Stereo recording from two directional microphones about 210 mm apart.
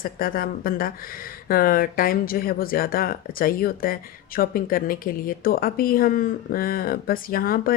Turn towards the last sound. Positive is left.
turn(degrees=45)  # may be behind; listen again after turning